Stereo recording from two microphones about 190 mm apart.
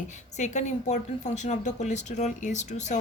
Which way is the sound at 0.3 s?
40° left (ahead or behind).